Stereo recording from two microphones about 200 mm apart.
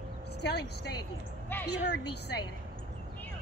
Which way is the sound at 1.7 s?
55° left (ahead or behind).